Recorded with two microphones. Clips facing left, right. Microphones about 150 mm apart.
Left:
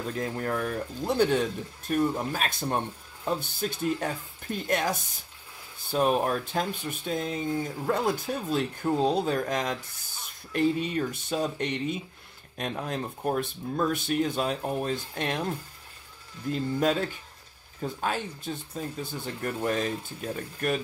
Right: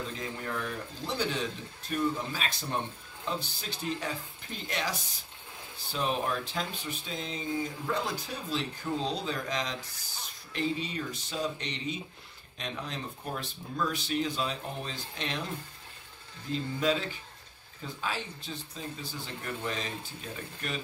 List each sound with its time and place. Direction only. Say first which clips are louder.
0.1 s speech: left 6 dB; 50° left (ahead or behind)
16.8 s speech: left 2 dB; 50° left (ahead or behind)